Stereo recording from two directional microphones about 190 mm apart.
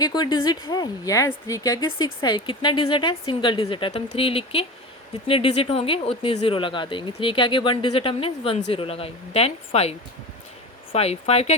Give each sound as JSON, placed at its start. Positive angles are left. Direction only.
{"t": 0.0, "sound": "speech", "side_deg": 20}
{"t": 10.9, "sound": "speech", "side_deg": 35}